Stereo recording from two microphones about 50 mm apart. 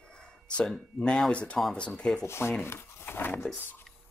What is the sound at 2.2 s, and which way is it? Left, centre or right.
Speech, left.